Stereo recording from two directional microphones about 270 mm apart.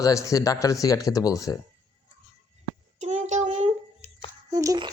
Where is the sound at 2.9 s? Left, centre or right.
Right.